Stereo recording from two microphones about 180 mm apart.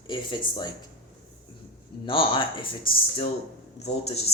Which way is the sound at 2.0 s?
30° left (ahead or behind).